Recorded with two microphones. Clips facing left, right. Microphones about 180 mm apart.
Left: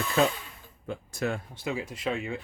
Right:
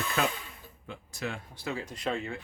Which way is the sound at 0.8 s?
45° left (ahead or behind).